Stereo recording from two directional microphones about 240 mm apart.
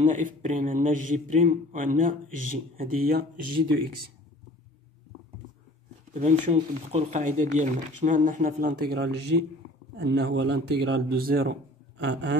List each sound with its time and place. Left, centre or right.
0.0 s speech: right
6.1 s speech: right